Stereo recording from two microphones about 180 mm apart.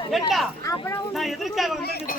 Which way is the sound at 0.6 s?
20° left (ahead or behind).